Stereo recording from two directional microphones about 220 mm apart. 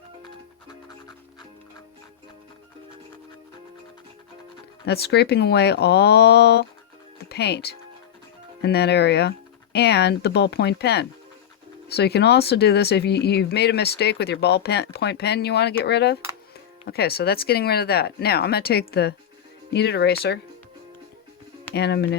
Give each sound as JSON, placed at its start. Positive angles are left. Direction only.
{"t": 4.9, "sound": "speech", "side_deg": 50}
{"t": 21.8, "sound": "speech", "side_deg": 50}